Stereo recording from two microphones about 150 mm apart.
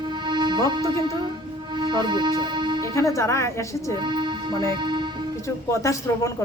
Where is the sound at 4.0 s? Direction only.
30° right (ahead or behind).